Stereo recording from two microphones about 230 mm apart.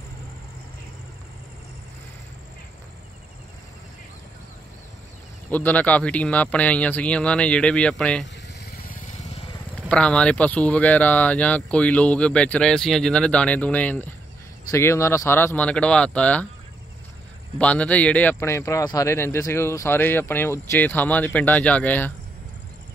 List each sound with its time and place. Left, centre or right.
5.5 s speech: centre
8.5 s vehicle: left
9.8 s a man's voice: centre
17.6 s a man's voice: centre